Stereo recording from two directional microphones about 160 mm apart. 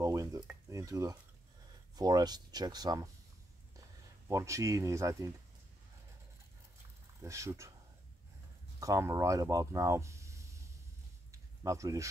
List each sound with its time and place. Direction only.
0.0 s stir: 20° right (ahead or behind)
0.7 s dishes: 20° right (ahead or behind)
2.0 s speech: 25° right (ahead or behind)
4.3 s speech: 20° right (ahead or behind)
7.2 s speech: 20° right (ahead or behind)
8.7 s speech: 20° right (ahead or behind)
11.3 s a sound: 20° right (ahead or behind)